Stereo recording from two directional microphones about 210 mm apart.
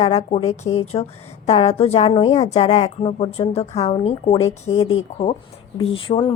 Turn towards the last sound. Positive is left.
turn(degrees=25)  # may be behind; listen again after turning